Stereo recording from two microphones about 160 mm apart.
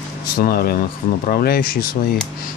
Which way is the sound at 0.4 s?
70° left (ahead or behind).